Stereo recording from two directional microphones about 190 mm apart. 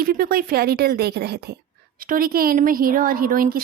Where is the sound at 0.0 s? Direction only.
50° right (ahead or behind).